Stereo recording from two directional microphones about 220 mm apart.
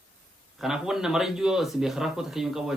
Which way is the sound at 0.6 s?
Centre (ahead or behind).